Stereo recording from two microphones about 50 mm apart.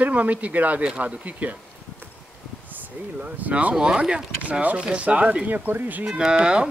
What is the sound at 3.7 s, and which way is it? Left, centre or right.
Speech, centre.